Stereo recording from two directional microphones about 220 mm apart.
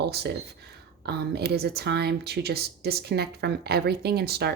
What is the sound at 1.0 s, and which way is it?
Speech, 45° right (ahead or behind).